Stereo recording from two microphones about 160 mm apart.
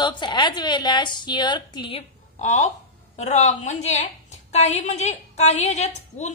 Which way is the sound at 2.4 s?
50° left (ahead or behind).